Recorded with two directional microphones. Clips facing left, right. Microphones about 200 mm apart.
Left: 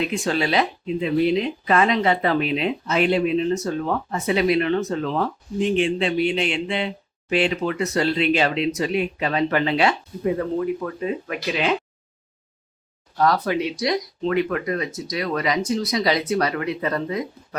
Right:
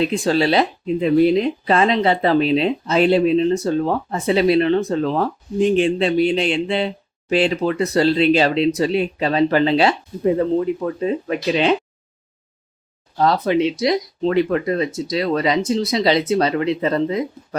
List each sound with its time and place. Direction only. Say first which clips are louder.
0.0 s speech: right 5 dB; 35° right (ahead or behind)
1.7 s speech: right 2 dB; 30° right (ahead or behind)
13.1 s speech: right 4 dB; 25° right (ahead or behind)